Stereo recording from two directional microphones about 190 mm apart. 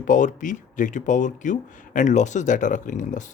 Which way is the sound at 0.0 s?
40° left (ahead or behind).